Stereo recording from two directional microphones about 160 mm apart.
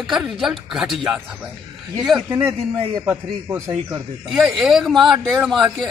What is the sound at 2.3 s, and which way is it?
A man's voice, 15° right (ahead or behind).